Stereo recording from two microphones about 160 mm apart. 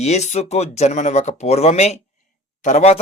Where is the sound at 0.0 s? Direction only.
45° left (ahead or behind).